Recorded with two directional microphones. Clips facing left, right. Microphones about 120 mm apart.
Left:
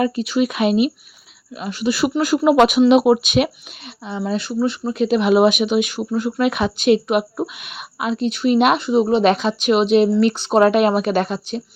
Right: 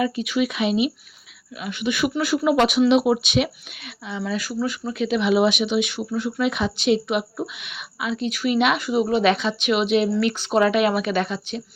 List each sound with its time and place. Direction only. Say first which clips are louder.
0.0 s speech: left 4 dB; 40° left (ahead or behind)
1.5 s speech: left 4 dB; 35° left (ahead or behind); by 3.5 s 50° left (ahead or behind)
4.2 s speech: left 5 dB; 25° left (ahead or behind)